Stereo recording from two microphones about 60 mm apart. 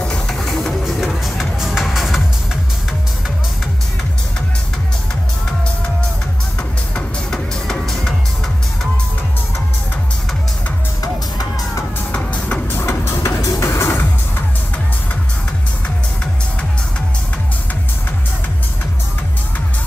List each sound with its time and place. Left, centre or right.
0.0 s music: centre
0.5 s music: centre
7.2 s music: centre
12.1 s music: left
12.7 s music: left